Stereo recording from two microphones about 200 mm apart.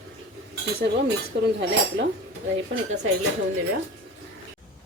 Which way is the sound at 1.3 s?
55° right (ahead or behind).